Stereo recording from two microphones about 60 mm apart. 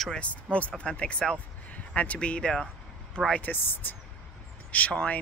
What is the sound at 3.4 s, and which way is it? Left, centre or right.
Speech, left.